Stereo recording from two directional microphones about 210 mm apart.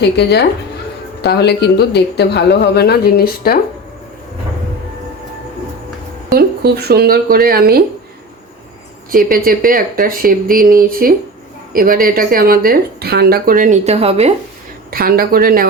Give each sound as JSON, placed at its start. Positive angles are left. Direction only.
{"t": 0.0, "sound": "speech", "side_deg": 50}
{"t": 6.3, "sound": "speech", "side_deg": -50}
{"t": 9.1, "sound": "speech", "side_deg": -45}
{"t": 14.8, "sound": "speech", "side_deg": -45}